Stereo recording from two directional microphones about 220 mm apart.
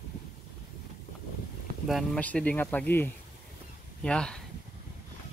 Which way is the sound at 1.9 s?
5° left (ahead or behind).